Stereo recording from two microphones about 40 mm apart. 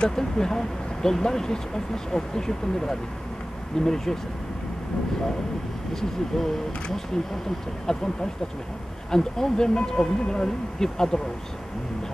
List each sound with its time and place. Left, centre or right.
0.0 s speech: centre
5.9 s speech: centre
7.8 s speech: centre